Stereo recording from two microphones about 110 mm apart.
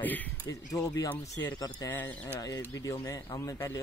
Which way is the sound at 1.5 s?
35° left (ahead or behind).